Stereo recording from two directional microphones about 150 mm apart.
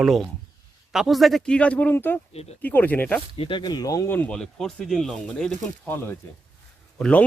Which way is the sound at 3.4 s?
35° left (ahead or behind).